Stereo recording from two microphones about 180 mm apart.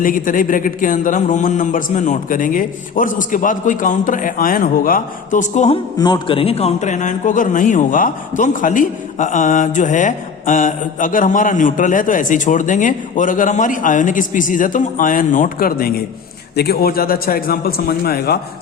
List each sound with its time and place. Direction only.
0.0 s a man's voice: 50° left (ahead or behind)
6.0 s a man's voice: 25° left (ahead or behind); by 18.3 s 60° left (ahead or behind)